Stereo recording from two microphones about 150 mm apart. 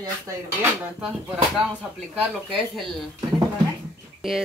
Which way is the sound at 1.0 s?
5° right (ahead or behind).